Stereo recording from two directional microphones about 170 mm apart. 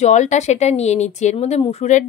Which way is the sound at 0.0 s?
45° left (ahead or behind).